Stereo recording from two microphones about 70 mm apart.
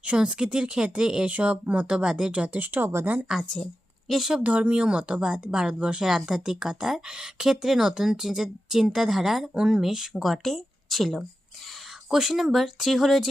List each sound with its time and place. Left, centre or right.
0.0 s speech: centre; by 3.1 s right
3.3 s speech: centre
4.4 s speech: centre